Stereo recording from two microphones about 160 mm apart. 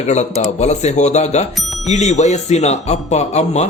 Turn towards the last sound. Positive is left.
turn(degrees=45)  # may be behind; listen again after turning